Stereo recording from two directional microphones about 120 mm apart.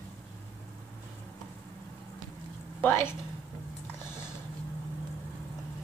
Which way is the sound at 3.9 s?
20° left (ahead or behind).